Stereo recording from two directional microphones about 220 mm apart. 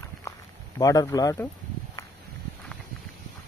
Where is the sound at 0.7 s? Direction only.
15° left (ahead or behind).